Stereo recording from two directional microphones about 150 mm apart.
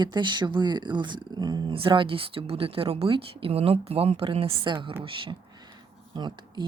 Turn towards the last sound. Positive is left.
turn(degrees=-30)  # may be behind; listen again after turning